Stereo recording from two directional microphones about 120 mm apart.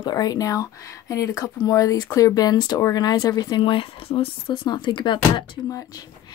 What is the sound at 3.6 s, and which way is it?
Speech, 50° left (ahead or behind).